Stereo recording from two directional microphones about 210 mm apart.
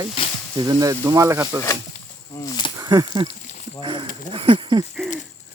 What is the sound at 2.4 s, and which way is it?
Speech, 20° left (ahead or behind).